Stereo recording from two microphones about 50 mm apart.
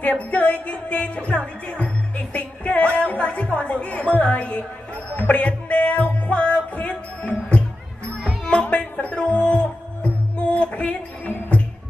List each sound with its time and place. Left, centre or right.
0.1 s music: left
4.2 s a woman's voice: left
5.1 s music: left